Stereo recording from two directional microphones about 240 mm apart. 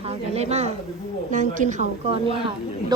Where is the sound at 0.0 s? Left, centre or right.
Right.